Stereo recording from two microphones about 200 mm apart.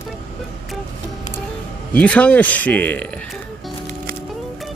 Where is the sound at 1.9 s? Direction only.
5° left (ahead or behind).